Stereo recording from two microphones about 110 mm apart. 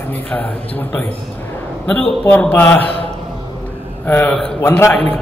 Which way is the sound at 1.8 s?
10° left (ahead or behind).